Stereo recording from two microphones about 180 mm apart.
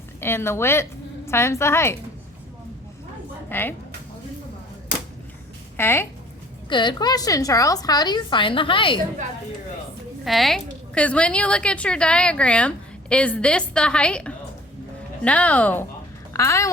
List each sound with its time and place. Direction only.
0.2 s a woman's voice: 15° left (ahead or behind)
3.5 s speech: 10° left (ahead or behind)
5.7 s speech: 10° left (ahead or behind)
6.7 s a woman's voice: 25° left (ahead or behind)
10.2 s a woman's voice: centre (ahead or behind); by 16.7 s 15° left (ahead or behind)